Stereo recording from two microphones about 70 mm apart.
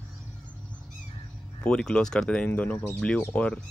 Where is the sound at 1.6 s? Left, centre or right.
Centre.